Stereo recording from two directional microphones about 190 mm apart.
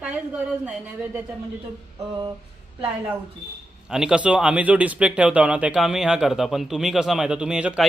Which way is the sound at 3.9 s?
5° right (ahead or behind).